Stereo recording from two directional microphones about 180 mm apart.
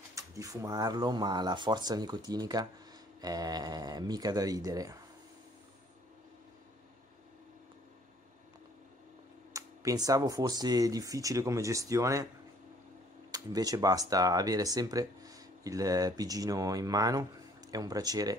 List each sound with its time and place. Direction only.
0.1 s speech: 15° right (ahead or behind)
9.5 s speech: 20° right (ahead or behind)
13.3 s speech: 20° right (ahead or behind)